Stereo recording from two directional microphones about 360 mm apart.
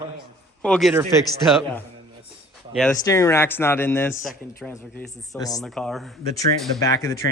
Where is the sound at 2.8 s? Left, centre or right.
Centre.